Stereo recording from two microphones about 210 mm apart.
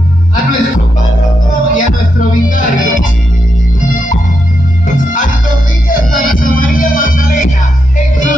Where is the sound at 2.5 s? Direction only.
40° left (ahead or behind).